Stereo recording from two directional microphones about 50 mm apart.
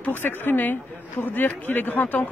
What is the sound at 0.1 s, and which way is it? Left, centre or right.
Speech, left.